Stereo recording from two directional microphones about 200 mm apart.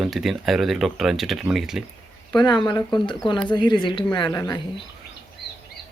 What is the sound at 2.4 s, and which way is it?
A woman's voice, 20° left (ahead or behind).